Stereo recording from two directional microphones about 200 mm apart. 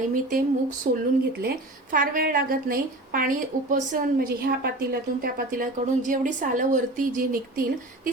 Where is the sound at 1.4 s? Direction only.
45° right (ahead or behind).